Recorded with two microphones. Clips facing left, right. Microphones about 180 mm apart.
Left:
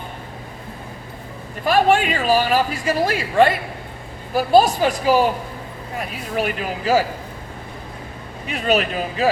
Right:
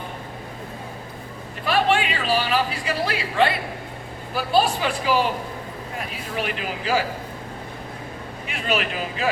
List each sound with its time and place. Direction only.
1.6 s a woman's voice: 45° left (ahead or behind)
6.3 s a woman's voice: 40° left (ahead or behind)
8.4 s a woman's voice: 40° left (ahead or behind)